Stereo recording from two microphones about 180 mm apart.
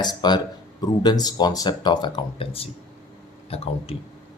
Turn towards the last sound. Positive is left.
turn(degrees=35)  # may be behind; listen again after turning